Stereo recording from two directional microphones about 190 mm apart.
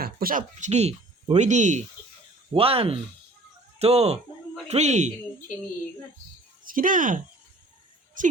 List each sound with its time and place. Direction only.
0.0 s a man's voice: 50° right (ahead or behind)
6.7 s a woman's voice: 45° right (ahead or behind)